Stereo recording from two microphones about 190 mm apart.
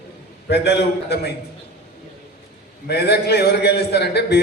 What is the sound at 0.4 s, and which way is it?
Speech, 60° left (ahead or behind).